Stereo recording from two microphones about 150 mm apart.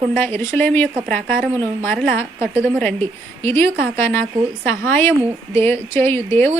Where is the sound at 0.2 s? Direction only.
15° left (ahead or behind).